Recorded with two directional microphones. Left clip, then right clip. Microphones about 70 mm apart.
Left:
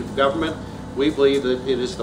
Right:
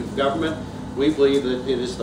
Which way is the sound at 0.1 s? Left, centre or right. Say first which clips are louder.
Left 2 dB; left.